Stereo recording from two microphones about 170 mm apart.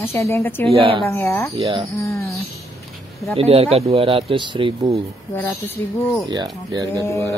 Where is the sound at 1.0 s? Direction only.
15° left (ahead or behind).